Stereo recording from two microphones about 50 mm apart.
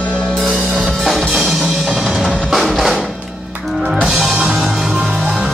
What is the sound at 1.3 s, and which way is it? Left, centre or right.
Music, centre.